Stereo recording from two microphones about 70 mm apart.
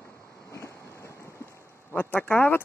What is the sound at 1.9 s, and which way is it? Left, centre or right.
Speech, left.